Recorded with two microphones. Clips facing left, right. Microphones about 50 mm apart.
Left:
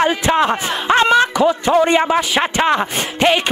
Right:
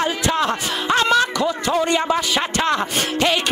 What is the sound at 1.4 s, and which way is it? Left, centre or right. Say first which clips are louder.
Speech: left 6 dB; left.